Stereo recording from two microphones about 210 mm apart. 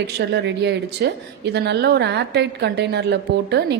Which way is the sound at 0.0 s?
55° right (ahead or behind).